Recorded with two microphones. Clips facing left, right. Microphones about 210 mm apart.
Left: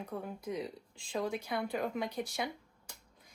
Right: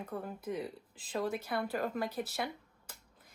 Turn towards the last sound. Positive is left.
turn(degrees=-5)  # may be behind; listen again after turning